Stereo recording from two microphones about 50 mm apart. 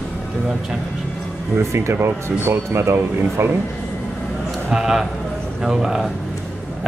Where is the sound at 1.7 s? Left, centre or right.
Right.